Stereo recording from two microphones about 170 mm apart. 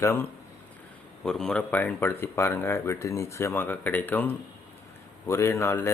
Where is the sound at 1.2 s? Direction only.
5° left (ahead or behind).